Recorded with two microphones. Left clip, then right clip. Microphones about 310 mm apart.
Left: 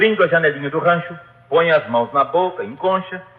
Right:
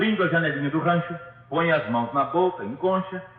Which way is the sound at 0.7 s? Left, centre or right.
Left.